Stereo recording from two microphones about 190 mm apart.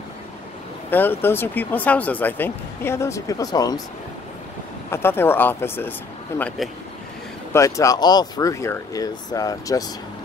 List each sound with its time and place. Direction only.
0.8 s speech: 10° left (ahead or behind)
4.9 s speech: 10° left (ahead or behind)